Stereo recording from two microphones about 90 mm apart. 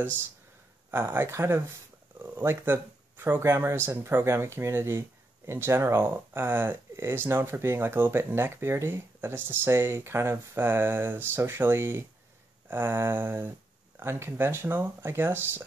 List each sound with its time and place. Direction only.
0.9 s speech: 25° right (ahead or behind)